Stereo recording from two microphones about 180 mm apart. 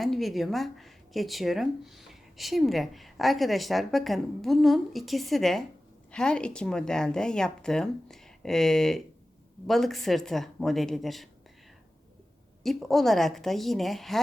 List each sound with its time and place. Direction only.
0.0 s speech: centre (ahead or behind)
12.6 s speech: centre (ahead or behind)